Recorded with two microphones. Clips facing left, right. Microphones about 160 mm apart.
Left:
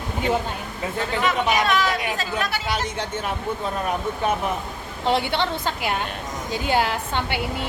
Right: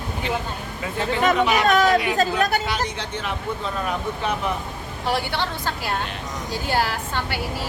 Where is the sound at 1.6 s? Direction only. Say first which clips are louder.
Right 5 dB; 45° right (ahead or behind).